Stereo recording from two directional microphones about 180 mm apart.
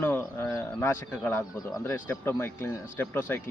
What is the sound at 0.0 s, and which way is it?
Speech, 10° left (ahead or behind).